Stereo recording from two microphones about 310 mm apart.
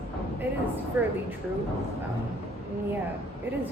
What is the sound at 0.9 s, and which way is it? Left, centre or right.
Speech, centre.